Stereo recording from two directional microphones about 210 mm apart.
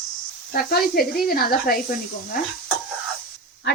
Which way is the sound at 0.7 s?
45° left (ahead or behind).